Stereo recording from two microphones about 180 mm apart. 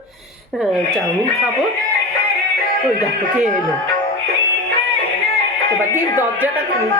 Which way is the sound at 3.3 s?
40° right (ahead or behind).